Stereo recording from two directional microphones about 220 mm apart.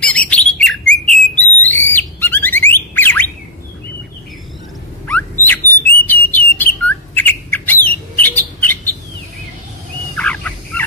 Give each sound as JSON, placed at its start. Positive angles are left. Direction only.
{"t": 0.0, "sound": "bird", "side_deg": 5}
{"t": 5.0, "sound": "bird", "side_deg": 10}
{"t": 10.1, "sound": "fowl", "side_deg": 5}